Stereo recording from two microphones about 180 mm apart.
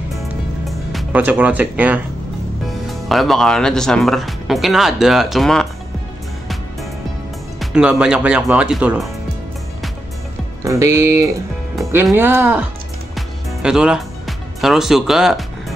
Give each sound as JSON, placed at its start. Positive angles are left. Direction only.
{"t": 0.7, "sound": "speech", "side_deg": -5}
{"t": 7.7, "sound": "speech", "side_deg": -5}
{"t": 10.6, "sound": "speech", "side_deg": -15}
{"t": 13.1, "sound": "music", "side_deg": -5}